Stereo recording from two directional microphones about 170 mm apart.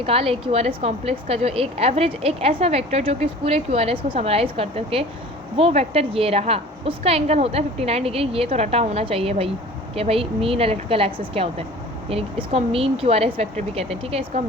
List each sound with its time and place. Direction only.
0.0 s a woman's voice: 35° right (ahead or behind)